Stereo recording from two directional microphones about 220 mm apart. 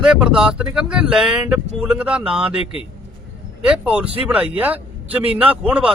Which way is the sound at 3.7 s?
5° right (ahead or behind).